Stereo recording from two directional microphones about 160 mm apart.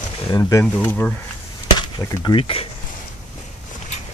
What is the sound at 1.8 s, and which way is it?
Speech, 20° left (ahead or behind).